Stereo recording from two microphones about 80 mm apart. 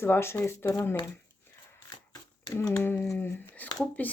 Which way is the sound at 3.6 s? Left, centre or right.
Centre.